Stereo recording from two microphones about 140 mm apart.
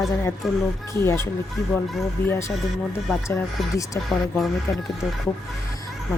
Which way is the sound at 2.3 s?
20° left (ahead or behind).